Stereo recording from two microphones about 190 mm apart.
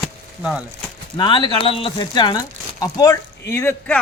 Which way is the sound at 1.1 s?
25° left (ahead or behind).